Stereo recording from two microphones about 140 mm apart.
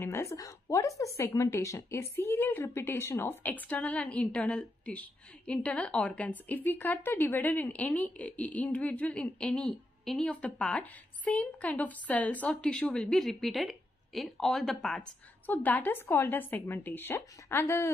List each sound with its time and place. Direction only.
0.0 s a woman's voice: 20° left (ahead or behind)